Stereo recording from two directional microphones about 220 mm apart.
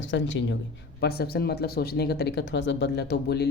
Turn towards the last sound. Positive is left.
turn(degrees=50)  # may be behind; listen again after turning